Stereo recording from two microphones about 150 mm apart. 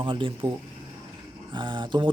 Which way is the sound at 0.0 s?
35° right (ahead or behind).